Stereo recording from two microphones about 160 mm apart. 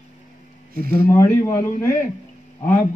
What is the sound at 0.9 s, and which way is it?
A man's voice, 15° left (ahead or behind).